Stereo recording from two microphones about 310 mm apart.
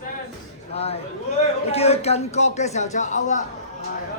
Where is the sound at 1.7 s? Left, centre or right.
Centre.